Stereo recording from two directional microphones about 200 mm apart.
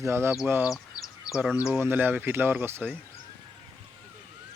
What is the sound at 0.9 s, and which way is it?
Bird, 15° left (ahead or behind).